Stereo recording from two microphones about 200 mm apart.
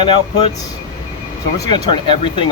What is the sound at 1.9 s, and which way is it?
Speech, 25° left (ahead or behind).